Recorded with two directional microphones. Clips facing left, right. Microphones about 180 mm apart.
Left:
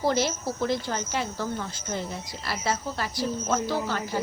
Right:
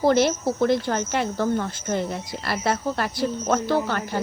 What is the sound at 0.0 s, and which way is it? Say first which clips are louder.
Speech: right 6 dB; 55° right (ahead or behind).